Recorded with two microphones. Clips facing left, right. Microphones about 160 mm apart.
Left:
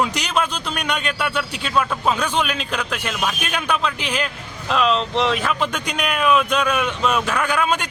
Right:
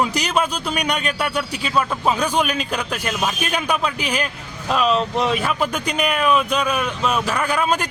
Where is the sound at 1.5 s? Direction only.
5° right (ahead or behind).